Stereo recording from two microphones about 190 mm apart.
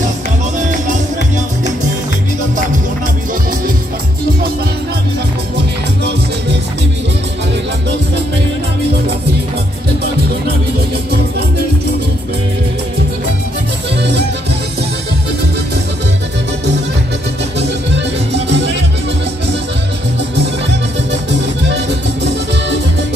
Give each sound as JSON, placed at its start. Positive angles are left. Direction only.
{"t": 0.6, "sound": "music", "side_deg": -40}
{"t": 17.6, "sound": "music", "side_deg": -65}
{"t": 21.1, "sound": "music", "side_deg": -65}